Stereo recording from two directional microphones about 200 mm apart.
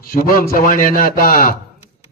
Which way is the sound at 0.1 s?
45° left (ahead or behind).